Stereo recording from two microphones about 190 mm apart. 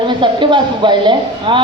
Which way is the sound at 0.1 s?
25° right (ahead or behind).